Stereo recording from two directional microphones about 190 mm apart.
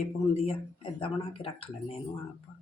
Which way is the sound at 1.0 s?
30° left (ahead or behind).